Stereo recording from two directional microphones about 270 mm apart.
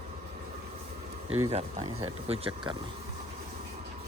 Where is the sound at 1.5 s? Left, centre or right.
Right.